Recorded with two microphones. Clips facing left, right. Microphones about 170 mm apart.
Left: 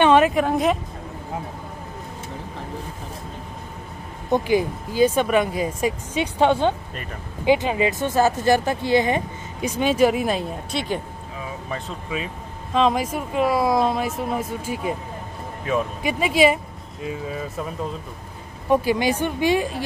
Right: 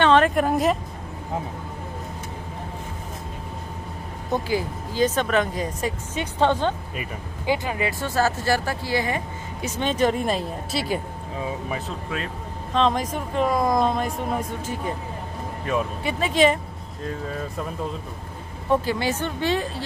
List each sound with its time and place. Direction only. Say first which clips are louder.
0.0 s a sound: left 2 dB; 10° left (ahead or behind)
0.3 s speech: left 1 dB; centre (ahead or behind)
4.3 s speech: left 5 dB; 20° left (ahead or behind); by 11.0 s 5° right (ahead or behind)
12.7 s speech: left 2 dB; 10° left (ahead or behind)
18.7 s speech: left 3 dB; 15° left (ahead or behind)